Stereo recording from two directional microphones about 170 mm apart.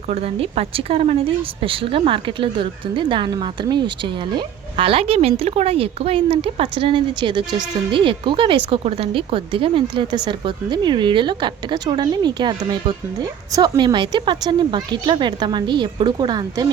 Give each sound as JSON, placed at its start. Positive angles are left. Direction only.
{"t": 0.1, "sound": "a woman's voice", "side_deg": -35}